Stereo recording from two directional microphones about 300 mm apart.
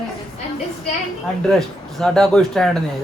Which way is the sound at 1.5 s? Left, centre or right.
Centre.